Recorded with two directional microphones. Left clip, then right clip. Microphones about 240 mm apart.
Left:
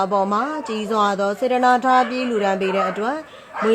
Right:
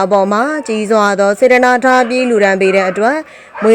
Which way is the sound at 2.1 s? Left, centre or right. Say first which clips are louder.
Right 10 dB; right.